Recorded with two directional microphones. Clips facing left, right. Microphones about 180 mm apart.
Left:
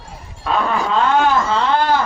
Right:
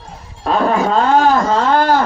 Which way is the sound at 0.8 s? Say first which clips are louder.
Right 2 dB; 40° right (ahead or behind).